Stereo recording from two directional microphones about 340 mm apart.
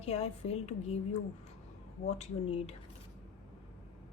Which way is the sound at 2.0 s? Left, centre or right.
Centre.